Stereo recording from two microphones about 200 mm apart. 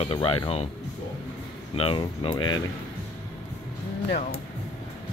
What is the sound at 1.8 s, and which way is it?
Speech, 25° left (ahead or behind).